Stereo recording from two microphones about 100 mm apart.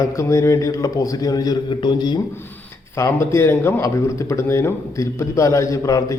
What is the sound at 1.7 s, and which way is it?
Speech, 50° left (ahead or behind).